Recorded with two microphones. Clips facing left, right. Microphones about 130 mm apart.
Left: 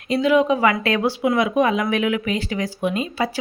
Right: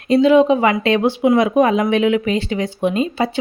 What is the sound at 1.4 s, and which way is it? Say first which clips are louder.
Speech: right 4 dB; 40° right (ahead or behind).